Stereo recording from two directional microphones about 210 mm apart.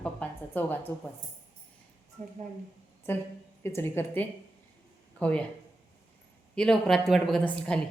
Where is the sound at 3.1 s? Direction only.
10° left (ahead or behind).